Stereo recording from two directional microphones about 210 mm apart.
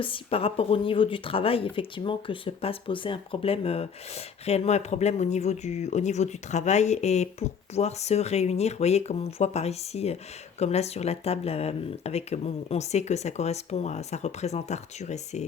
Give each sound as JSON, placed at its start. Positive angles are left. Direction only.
{"t": 0.0, "sound": "speech", "side_deg": 25}